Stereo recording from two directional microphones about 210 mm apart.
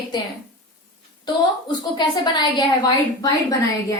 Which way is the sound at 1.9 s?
20° left (ahead or behind).